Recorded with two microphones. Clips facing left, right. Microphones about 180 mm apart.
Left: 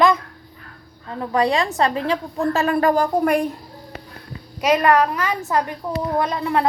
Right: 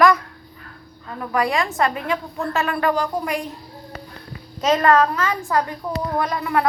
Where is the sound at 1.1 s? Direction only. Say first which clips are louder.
Left 2 dB; 25° left (ahead or behind); by 3.5 s 55° left (ahead or behind).